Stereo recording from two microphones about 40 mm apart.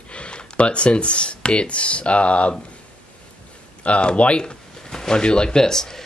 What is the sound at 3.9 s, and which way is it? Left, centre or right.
Speech, left.